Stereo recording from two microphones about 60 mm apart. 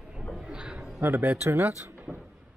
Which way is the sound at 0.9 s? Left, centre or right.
Right.